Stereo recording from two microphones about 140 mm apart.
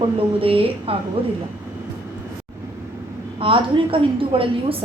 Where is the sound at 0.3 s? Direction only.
40° right (ahead or behind).